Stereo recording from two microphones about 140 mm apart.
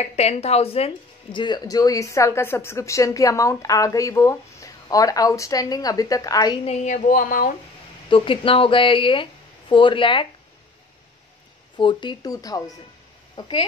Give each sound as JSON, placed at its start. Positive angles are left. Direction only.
{"t": 0.0, "sound": "speech", "side_deg": 50}
{"t": 6.6, "sound": "speech", "side_deg": 50}
{"t": 8.1, "sound": "speech", "side_deg": 40}
{"t": 11.7, "sound": "speech", "side_deg": 35}